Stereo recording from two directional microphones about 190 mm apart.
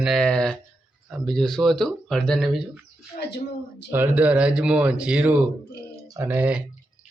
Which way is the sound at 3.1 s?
60° left (ahead or behind).